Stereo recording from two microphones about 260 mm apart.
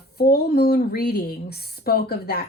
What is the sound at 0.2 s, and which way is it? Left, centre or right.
Speech, left.